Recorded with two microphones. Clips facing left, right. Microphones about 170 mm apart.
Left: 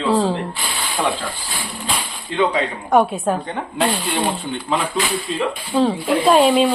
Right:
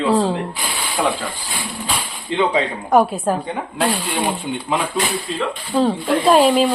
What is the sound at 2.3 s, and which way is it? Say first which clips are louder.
Speech: even; 20° right (ahead or behind).